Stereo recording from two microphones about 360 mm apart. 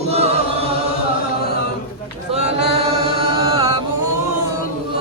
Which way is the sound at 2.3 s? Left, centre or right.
Centre.